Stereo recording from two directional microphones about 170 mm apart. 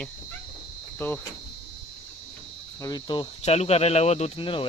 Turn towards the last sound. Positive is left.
turn(degrees=30)  # may be behind; listen again after turning